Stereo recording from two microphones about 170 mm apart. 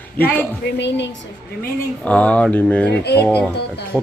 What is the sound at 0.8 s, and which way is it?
Speech, 90° left.